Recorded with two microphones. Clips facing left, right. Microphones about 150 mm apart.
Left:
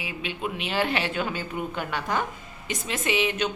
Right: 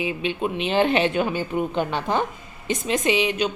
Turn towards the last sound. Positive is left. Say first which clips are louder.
# right 4 dB
turn(degrees=-15)  # may be behind; listen again after turning